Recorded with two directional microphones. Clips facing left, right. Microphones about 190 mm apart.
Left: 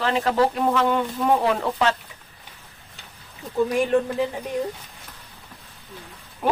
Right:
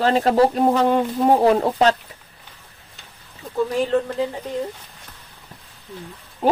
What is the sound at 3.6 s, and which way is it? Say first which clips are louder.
Speech: even; 15° left (ahead or behind).